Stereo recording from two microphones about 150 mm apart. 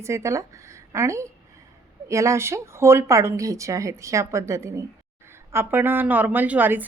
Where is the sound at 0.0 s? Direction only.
20° right (ahead or behind).